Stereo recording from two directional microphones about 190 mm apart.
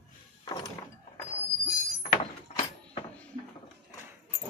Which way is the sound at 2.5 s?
35° left (ahead or behind).